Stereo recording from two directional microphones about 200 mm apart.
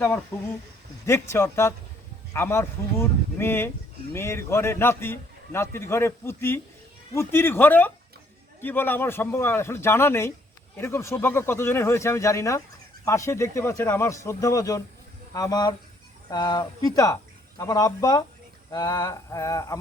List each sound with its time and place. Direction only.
0.3 s a man's voice: 10° left (ahead or behind)